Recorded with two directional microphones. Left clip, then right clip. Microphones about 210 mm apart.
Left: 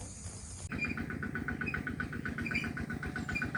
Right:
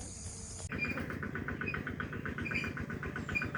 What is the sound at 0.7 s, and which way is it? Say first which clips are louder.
Vehicle: even; 40° left (ahead or behind).